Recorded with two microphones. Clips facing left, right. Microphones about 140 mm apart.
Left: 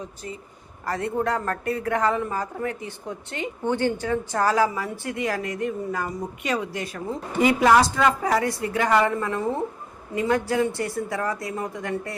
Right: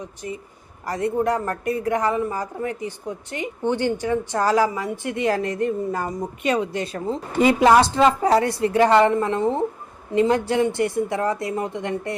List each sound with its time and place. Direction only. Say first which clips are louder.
0.9 s a woman's voice: right 3 dB; 15° right (ahead or behind)